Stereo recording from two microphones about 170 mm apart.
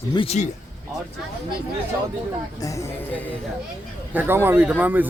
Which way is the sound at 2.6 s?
20° left (ahead or behind).